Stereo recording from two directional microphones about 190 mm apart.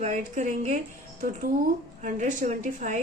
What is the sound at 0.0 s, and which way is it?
Speech, 40° right (ahead or behind).